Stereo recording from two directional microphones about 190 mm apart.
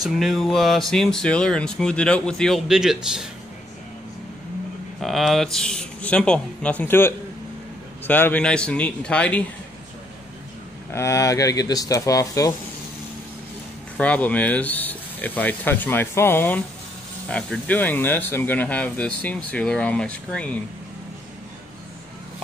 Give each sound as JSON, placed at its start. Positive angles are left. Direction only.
{"t": 0.0, "sound": "speech", "side_deg": 0}
{"t": 5.0, "sound": "speech", "side_deg": 0}
{"t": 10.9, "sound": "speech", "side_deg": 15}
{"t": 13.9, "sound": "speech", "side_deg": 5}